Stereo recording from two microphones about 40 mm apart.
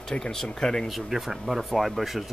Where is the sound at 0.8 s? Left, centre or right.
Centre.